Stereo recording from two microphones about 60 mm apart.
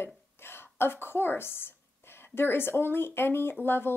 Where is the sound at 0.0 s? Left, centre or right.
Left.